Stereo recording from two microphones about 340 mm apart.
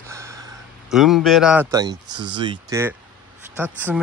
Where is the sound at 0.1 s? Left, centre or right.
Centre.